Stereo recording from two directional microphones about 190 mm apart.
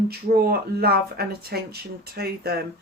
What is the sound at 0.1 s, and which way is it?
Speech, 55° right (ahead or behind).